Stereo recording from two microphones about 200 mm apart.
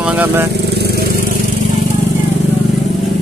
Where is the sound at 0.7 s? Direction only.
50° right (ahead or behind).